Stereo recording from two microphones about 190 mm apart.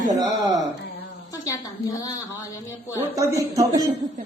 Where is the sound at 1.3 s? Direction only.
20° left (ahead or behind).